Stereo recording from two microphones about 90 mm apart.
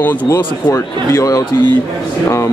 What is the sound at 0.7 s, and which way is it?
A man's voice, 40° left (ahead or behind).